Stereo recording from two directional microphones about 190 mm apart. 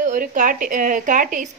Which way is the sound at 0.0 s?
45° right (ahead or behind).